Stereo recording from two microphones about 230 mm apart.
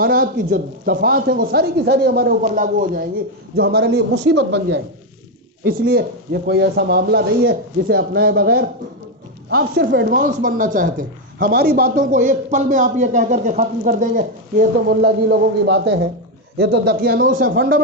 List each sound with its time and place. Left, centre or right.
0.0 s speech: right
14.8 s speech: right